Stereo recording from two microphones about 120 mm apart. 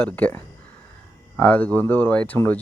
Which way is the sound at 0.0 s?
10° left (ahead or behind).